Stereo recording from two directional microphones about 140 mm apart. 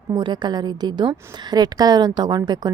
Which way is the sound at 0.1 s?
30° right (ahead or behind).